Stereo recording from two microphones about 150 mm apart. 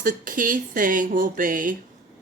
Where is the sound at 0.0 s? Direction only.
65° right (ahead or behind).